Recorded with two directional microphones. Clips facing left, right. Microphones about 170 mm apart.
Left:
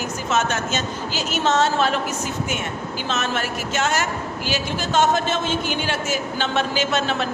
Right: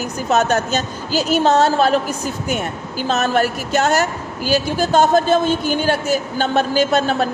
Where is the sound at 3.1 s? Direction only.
40° right (ahead or behind).